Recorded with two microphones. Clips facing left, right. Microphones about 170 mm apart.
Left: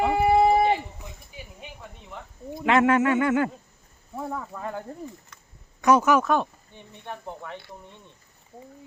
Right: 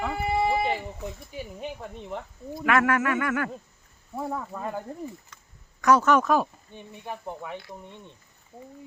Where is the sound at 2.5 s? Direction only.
25° left (ahead or behind).